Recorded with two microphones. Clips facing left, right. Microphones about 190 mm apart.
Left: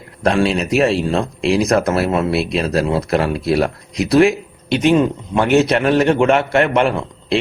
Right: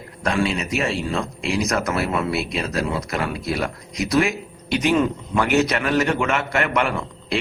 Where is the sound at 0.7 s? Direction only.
35° left (ahead or behind).